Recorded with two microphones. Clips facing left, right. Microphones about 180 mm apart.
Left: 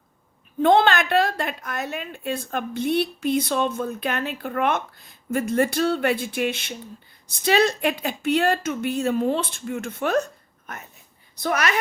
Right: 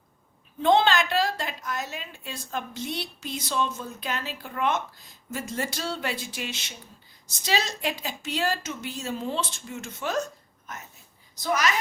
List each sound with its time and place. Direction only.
0.6 s a woman's voice: 55° left (ahead or behind)